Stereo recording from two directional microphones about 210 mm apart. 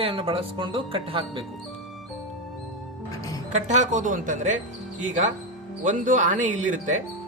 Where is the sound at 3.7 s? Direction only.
35° right (ahead or behind).